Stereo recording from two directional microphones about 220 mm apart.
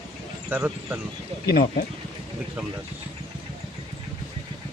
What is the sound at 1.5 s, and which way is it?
Speech, 45° left (ahead or behind).